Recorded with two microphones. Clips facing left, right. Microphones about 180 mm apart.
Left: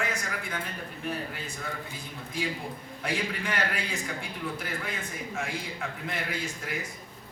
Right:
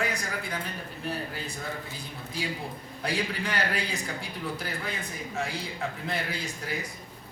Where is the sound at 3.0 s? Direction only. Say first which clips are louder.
Right 1 dB; 35° right (ahead or behind).